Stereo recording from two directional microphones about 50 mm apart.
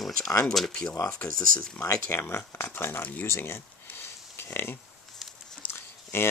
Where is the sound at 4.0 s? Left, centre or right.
Left.